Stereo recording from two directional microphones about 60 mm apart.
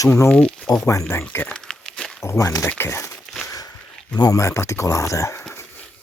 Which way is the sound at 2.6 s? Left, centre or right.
Left.